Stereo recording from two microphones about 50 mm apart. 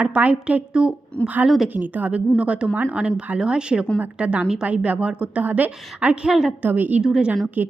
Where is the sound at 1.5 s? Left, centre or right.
Centre.